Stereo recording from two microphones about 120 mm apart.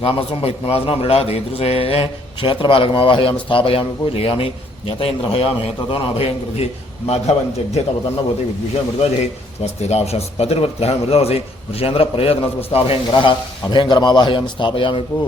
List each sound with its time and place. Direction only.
0.0 s a man's voice: 50° left (ahead or behind)
13.1 s a man's voice: 40° left (ahead or behind)